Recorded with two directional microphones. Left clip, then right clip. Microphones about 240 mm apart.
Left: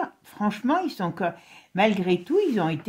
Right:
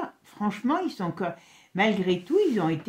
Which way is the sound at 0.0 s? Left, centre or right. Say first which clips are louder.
Left 3 dB; left.